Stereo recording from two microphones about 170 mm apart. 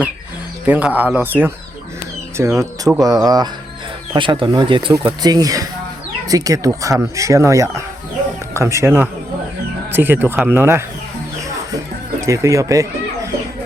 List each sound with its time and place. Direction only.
0.6 s speech: 10° right (ahead or behind)
12.2 s speech: 20° right (ahead or behind)